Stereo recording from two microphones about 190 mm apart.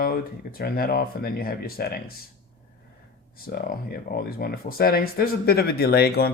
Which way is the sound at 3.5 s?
50° left (ahead or behind).